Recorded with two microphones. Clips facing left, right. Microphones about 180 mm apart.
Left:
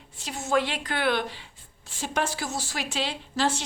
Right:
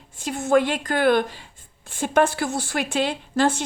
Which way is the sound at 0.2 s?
50° right (ahead or behind).